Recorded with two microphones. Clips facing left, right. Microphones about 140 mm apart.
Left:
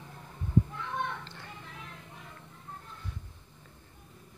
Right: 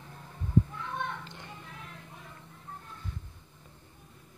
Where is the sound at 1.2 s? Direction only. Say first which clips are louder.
Right 1 dB; 20° right (ahead or behind).